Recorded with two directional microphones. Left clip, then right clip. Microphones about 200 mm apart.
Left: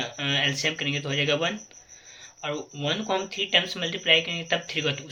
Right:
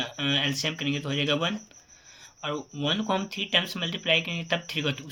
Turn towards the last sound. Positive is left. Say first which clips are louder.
# left 2 dB
turn(degrees=-25)  # may be behind; listen again after turning